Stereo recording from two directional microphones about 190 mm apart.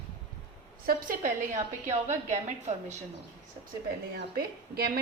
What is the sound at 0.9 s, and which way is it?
Speech, 45° right (ahead or behind).